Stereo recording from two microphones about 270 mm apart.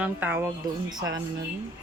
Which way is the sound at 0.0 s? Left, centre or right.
Centre.